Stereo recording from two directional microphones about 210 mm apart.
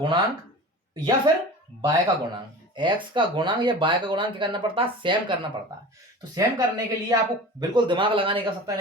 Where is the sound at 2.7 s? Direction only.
20° right (ahead or behind).